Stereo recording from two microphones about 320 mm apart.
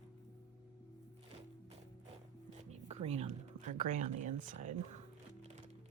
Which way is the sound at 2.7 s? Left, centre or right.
Centre.